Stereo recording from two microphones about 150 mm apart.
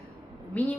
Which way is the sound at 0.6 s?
10° left (ahead or behind).